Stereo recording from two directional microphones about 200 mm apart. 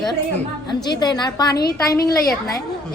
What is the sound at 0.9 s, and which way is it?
A woman's voice, 20° left (ahead or behind).